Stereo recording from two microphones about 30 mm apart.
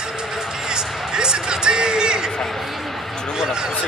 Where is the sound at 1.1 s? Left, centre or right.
Right.